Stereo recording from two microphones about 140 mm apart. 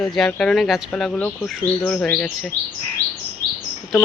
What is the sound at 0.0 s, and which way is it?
Speech, 5° left (ahead or behind).